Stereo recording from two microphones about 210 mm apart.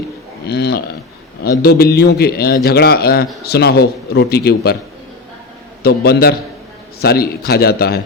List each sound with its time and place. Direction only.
0.4 s a man's voice: 50° left (ahead or behind)
5.8 s a man's voice: 50° left (ahead or behind)